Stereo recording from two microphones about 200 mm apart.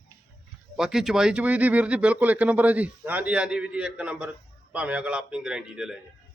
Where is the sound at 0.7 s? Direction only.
Centre (ahead or behind).